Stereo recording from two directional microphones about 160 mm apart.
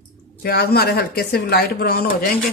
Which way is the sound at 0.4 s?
75° left (ahead or behind).